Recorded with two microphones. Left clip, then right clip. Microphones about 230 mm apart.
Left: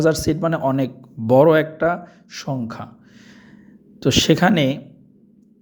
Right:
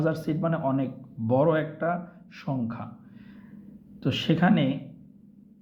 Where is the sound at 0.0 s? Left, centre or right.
Left.